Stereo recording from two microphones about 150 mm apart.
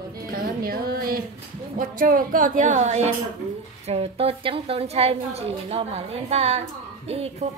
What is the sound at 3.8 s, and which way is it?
A woman's voice, 40° right (ahead or behind).